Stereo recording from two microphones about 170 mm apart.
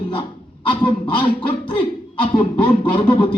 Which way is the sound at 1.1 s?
30° left (ahead or behind).